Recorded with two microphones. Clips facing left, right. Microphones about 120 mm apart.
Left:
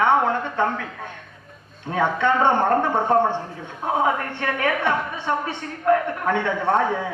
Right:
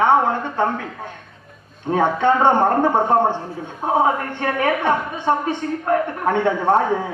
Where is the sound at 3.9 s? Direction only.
35° right (ahead or behind).